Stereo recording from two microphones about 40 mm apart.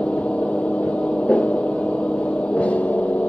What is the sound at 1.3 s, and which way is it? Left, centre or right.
Gong, left.